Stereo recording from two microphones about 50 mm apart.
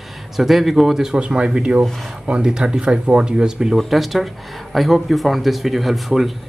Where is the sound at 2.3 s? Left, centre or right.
Centre.